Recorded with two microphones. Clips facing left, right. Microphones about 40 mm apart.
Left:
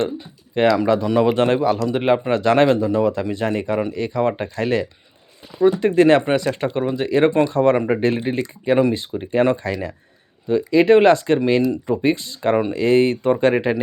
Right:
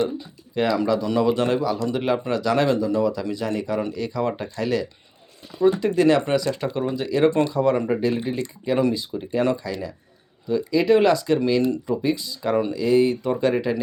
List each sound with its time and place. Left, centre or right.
0.0 s speech: left
7.5 s speech: left